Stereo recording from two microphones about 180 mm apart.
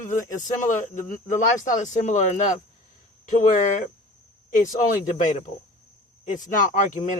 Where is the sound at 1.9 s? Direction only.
40° left (ahead or behind).